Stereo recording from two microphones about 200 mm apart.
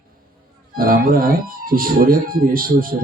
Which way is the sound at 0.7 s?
45° right (ahead or behind).